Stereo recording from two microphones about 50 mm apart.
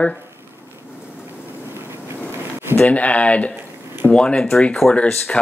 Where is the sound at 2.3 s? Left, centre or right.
Right.